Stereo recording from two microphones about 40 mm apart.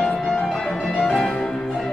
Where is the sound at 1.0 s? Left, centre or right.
Centre.